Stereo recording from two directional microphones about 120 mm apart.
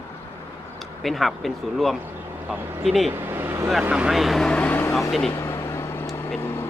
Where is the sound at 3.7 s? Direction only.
5° right (ahead or behind); by 5.0 s 15° left (ahead or behind).